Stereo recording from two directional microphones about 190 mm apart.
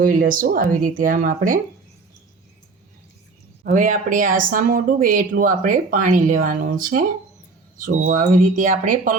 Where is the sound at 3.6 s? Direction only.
45° right (ahead or behind).